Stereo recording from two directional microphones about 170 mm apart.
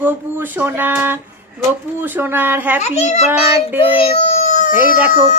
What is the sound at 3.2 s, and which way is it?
Music, 10° right (ahead or behind).